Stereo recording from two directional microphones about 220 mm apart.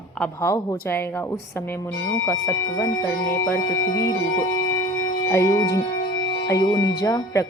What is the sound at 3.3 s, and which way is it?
Music, 45° left (ahead or behind).